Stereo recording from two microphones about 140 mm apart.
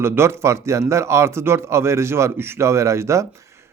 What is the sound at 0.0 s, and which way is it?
Speech, 20° right (ahead or behind).